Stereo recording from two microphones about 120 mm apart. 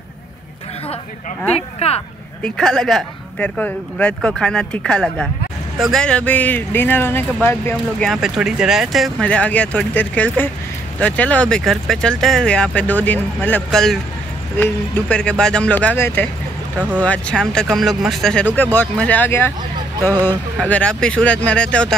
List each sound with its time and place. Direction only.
1.8 s speech: 60° left (ahead or behind)
2.4 s speech: 5° left (ahead or behind)
8.0 s speech: centre (ahead or behind)
9.2 s speech: 10° left (ahead or behind)
13.7 s speech: 5° left (ahead or behind)
16.7 s speech: 10° right (ahead or behind)
17.0 s speech: 10° left (ahead or behind)